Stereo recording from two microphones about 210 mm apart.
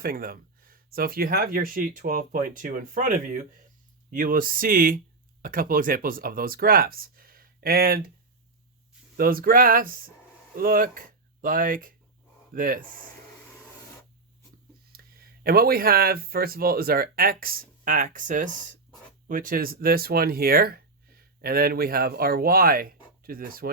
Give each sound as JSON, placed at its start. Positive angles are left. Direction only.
{"t": 0.0, "sound": "speech", "side_deg": -45}
{"t": 9.1, "sound": "speech", "side_deg": -45}
{"t": 14.9, "sound": "speech", "side_deg": -45}